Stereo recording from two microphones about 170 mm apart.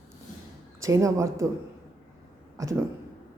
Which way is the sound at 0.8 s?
20° right (ahead or behind).